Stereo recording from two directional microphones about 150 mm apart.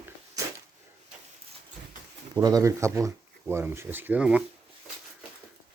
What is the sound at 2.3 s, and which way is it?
Speech, 25° right (ahead or behind).